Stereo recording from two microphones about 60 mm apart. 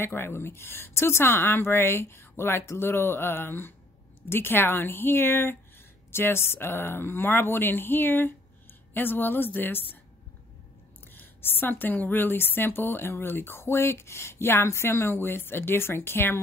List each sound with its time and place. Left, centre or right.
0.0 s a woman's voice: left
2.8 s a woman's voice: left
11.1 s a woman's voice: left